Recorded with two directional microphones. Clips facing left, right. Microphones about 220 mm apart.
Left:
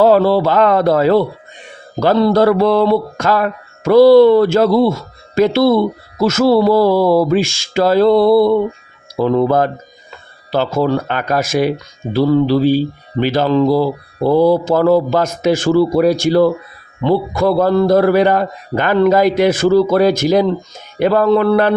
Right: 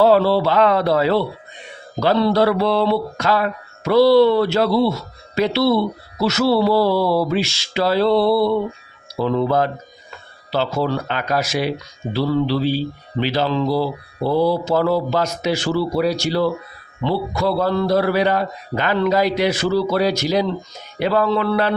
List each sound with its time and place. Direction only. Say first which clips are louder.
0.0 s speech: left 3 dB; 50° left (ahead or behind)